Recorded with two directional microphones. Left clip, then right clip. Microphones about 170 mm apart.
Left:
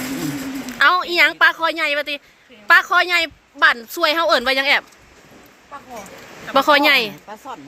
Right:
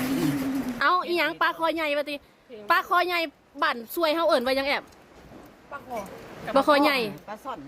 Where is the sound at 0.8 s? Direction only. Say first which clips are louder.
Left 9 dB; centre (ahead or behind).